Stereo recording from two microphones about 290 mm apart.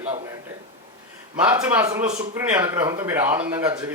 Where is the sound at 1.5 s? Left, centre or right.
Centre.